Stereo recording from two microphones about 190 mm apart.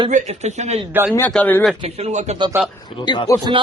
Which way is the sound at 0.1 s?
40° right (ahead or behind).